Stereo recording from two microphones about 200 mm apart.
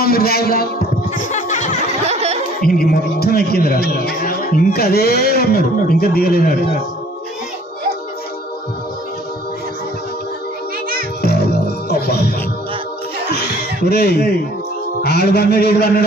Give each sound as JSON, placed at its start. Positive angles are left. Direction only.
{"t": 0.0, "sound": "a man's voice", "side_deg": 50}
{"t": 1.1, "sound": "a sound", "side_deg": 35}
{"t": 2.0, "sound": "music", "side_deg": -30}
{"t": 2.6, "sound": "a man's voice", "side_deg": 45}
{"t": 11.2, "sound": "music", "side_deg": 50}
{"t": 13.3, "sound": "a sound", "side_deg": 55}
{"t": 15.0, "sound": "a man's voice", "side_deg": 55}